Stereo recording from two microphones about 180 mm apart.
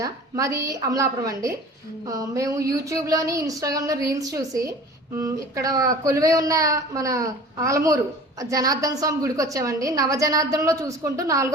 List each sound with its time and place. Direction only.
0.0 s speech: 20° right (ahead or behind)